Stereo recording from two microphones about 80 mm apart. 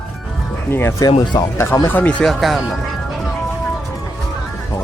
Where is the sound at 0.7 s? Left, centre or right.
Left.